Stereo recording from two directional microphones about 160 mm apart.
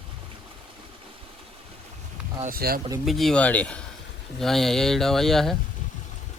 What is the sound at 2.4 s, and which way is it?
Speech, 70° right (ahead or behind).